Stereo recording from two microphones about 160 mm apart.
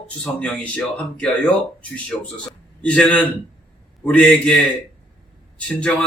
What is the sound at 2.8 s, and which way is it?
A man's voice, 5° left (ahead or behind).